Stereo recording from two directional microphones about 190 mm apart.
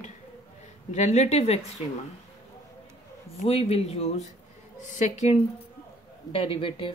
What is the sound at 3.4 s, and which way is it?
Speech, 30° left (ahead or behind).